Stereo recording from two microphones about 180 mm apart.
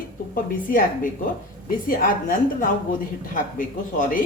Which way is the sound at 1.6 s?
50° left (ahead or behind).